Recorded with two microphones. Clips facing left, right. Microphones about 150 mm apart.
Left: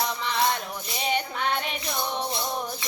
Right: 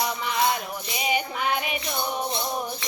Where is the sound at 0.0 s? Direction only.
5° right (ahead or behind).